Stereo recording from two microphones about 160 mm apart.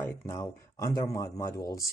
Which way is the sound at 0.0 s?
20° left (ahead or behind).